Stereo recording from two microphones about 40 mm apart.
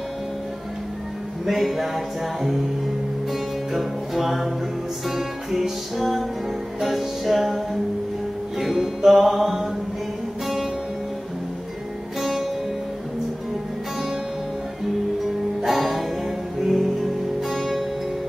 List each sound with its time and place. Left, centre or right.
1.4 s music: centre
3.7 s music: centre
12.2 s music: centre
15.6 s music: centre